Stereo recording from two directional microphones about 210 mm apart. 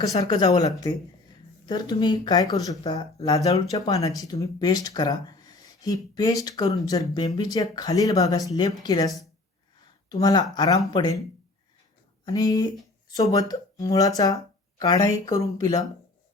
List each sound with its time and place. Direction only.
0.0 s speech: 15° left (ahead or behind)
1.6 s speech: 20° left (ahead or behind)
12.2 s speech: 20° left (ahead or behind)